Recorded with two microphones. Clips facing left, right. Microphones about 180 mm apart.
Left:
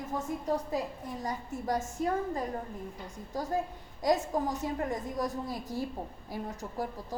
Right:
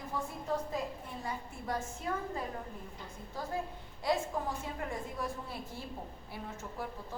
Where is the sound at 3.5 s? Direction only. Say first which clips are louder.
Left 5 dB; 40° left (ahead or behind).